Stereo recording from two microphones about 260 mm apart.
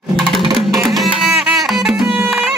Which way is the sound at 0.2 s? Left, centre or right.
Centre.